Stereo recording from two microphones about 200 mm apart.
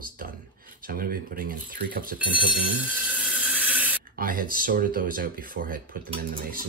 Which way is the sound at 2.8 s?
5° right (ahead or behind).